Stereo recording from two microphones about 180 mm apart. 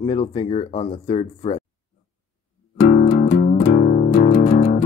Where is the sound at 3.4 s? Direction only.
55° left (ahead or behind).